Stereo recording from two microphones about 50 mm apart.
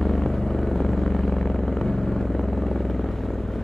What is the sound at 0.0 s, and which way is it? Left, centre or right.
Vehicle, centre.